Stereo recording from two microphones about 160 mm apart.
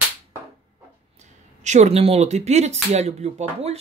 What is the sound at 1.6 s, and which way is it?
Speech, 45° right (ahead or behind).